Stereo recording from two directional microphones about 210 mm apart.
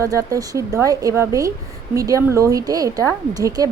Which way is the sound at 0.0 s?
15° right (ahead or behind).